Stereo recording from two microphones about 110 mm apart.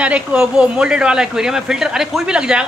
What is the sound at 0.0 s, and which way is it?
Speech, 10° right (ahead or behind).